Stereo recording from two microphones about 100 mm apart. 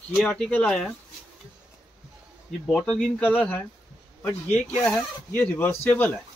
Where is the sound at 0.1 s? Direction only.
5° left (ahead or behind).